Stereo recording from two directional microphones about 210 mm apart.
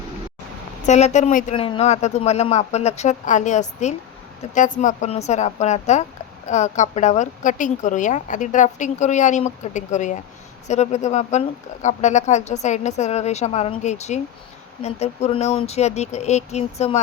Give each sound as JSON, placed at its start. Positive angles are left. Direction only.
{"t": 0.9, "sound": "a woman's voice", "side_deg": 35}
{"t": 1.5, "sound": "a woman's voice", "side_deg": 25}